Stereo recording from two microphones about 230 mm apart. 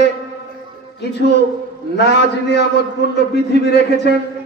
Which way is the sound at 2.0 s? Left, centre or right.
Left.